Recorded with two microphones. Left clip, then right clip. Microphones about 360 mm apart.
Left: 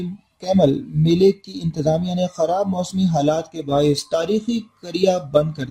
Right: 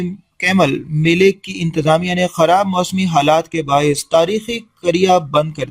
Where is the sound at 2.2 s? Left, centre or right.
Right.